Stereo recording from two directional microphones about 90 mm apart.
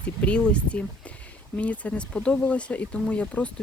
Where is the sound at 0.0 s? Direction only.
15° left (ahead or behind).